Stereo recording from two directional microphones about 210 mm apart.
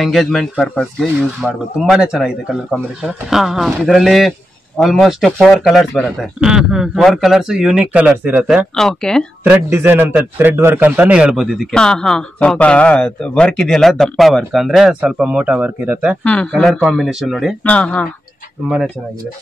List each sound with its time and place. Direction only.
0.0 s a man's voice: centre (ahead or behind)
9.5 s a man's voice: 10° right (ahead or behind)
16.3 s a man's voice: 5° left (ahead or behind)